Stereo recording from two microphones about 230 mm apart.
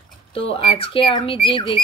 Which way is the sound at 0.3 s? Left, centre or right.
Left.